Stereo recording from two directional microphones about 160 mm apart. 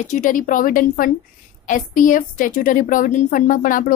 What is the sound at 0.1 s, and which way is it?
A woman's voice, 55° left (ahead or behind).